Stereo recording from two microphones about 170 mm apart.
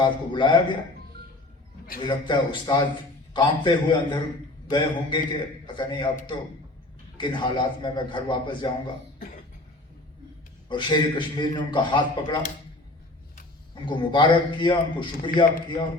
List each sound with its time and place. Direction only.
0.0 s a man's voice: 30° left (ahead or behind)
2.0 s a man's voice: 25° left (ahead or behind)
7.2 s a man's voice: 25° left (ahead or behind)
10.7 s a man's voice: 25° left (ahead or behind)
13.8 s a man's voice: 25° left (ahead or behind)